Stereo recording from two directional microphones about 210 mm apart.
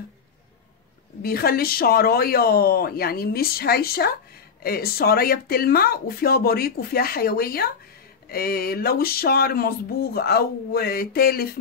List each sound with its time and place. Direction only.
1.2 s a woman's voice: 45° left (ahead or behind)